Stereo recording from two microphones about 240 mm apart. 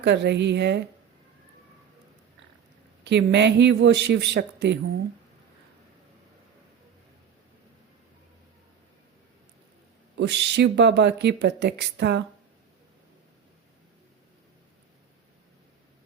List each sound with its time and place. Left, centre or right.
0.0 s speech: right
3.0 s speech: right
10.2 s speech: right